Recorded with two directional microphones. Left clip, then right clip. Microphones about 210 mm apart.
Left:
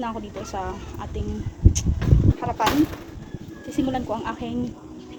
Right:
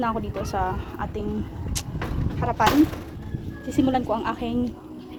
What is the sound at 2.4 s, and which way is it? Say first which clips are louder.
Speech: right 4 dB; centre (ahead or behind).